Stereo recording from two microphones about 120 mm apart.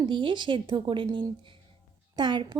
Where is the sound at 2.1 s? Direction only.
40° right (ahead or behind).